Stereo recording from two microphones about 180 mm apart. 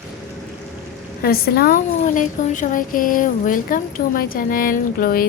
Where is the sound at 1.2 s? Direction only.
60° left (ahead or behind).